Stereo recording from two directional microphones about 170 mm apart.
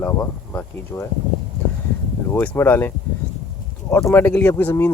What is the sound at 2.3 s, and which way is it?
Speech, 10° left (ahead or behind).